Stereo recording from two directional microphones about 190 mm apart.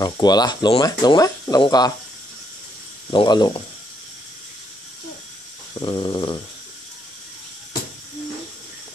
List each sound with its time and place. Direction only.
0.0 s speech: 20° left (ahead or behind)
3.1 s speech: 25° left (ahead or behind)
5.8 s speech: 25° left (ahead or behind)